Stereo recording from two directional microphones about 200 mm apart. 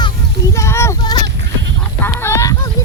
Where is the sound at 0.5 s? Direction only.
15° left (ahead or behind).